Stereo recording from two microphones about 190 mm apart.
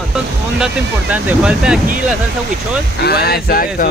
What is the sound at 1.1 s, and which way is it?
Speech, 5° right (ahead or behind).